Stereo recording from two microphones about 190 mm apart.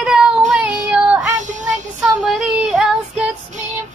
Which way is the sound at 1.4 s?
40° right (ahead or behind).